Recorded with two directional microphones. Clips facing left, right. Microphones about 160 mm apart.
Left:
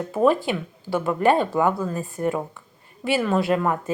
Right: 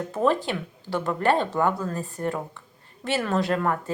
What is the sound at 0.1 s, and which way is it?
A woman's voice, 15° left (ahead or behind).